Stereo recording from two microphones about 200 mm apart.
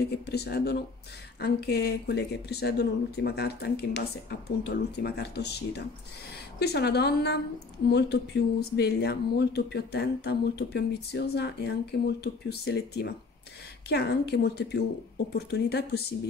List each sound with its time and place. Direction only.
0.0 s speech: 55° left (ahead or behind)